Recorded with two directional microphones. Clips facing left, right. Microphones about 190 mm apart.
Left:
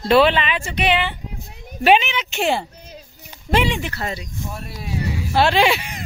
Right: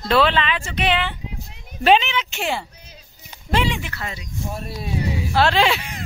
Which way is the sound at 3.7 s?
35° left (ahead or behind).